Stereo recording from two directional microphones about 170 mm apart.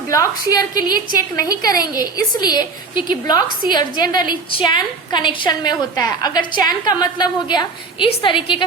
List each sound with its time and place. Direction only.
0.1 s a woman's voice: 20° left (ahead or behind)